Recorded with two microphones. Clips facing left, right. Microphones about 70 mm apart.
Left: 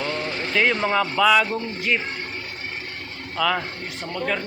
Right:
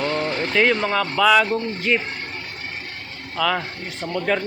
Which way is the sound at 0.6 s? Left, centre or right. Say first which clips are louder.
Right 1 dB; centre.